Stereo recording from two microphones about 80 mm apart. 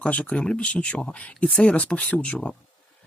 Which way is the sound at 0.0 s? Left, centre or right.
Centre.